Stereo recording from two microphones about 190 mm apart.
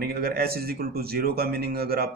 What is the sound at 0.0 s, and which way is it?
A man's voice, 55° right (ahead or behind).